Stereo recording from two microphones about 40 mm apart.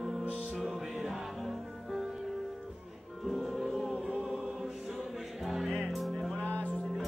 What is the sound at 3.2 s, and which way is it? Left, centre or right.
Music, centre.